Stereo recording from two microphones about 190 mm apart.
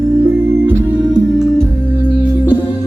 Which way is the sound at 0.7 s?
5° right (ahead or behind).